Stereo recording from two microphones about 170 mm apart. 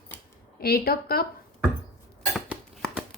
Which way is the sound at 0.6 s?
65° left (ahead or behind).